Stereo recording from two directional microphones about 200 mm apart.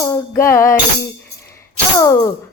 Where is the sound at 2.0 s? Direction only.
15° left (ahead or behind).